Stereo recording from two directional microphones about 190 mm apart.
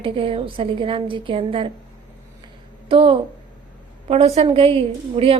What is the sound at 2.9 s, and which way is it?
A woman's voice, 30° right (ahead or behind).